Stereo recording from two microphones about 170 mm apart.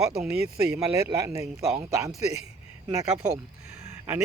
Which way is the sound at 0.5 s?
20° right (ahead or behind).